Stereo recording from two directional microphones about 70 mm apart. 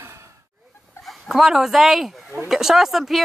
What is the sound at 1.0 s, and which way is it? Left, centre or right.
Speech, centre.